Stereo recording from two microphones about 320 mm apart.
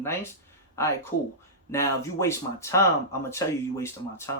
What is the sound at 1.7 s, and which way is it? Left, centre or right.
Speech, centre.